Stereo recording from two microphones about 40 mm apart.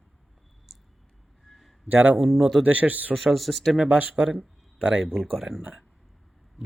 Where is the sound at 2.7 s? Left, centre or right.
Right.